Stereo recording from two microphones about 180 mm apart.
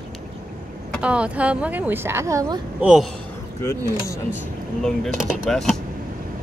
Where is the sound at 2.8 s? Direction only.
5° right (ahead or behind).